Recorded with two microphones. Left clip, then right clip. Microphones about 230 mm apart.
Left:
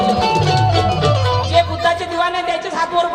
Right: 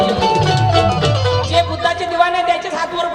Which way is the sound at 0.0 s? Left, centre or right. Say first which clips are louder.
Right 1 dB; centre.